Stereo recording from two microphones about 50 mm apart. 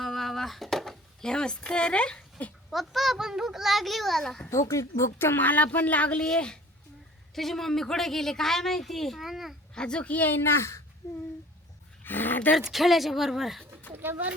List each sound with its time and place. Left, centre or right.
0.0 s a sound: centre
2.6 s a child's voice: centre
4.4 s a woman's voice: left
5.1 s speech: left
6.2 s a woman's voice: centre
9.7 s speech: centre; by 10.6 s left
12.0 s speech: left
12.5 s a child's voice: centre
13.9 s speech: right